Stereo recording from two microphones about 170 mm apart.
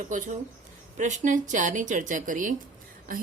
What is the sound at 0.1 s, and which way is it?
A woman's voice, 50° right (ahead or behind).